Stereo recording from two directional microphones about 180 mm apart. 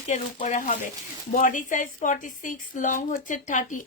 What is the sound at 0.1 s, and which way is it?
A woman's voice, 45° left (ahead or behind).